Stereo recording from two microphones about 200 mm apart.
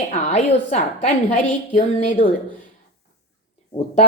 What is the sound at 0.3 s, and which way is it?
A woman's voice, 35° left (ahead or behind).